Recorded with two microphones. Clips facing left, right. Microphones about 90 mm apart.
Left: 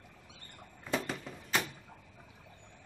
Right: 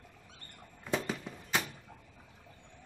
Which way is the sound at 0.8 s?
Centre (ahead or behind).